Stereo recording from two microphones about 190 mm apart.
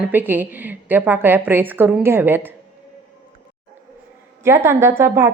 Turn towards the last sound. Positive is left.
turn(degrees=-15)  # may be behind; listen again after turning